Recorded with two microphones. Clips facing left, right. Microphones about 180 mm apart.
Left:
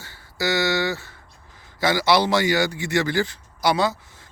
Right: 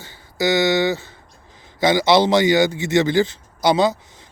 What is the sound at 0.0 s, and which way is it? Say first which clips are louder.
Music: right 5 dB; 20° right (ahead or behind).